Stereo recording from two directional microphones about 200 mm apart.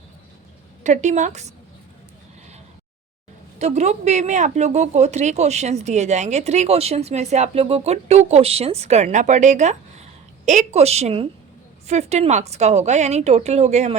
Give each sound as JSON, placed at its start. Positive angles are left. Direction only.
{"t": 0.9, "sound": "speech", "side_deg": -35}
{"t": 3.6, "sound": "speech", "side_deg": -35}